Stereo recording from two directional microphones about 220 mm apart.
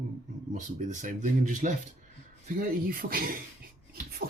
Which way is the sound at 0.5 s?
35° right (ahead or behind).